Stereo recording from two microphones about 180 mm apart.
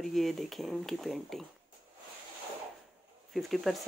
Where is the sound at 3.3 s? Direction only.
Centre (ahead or behind).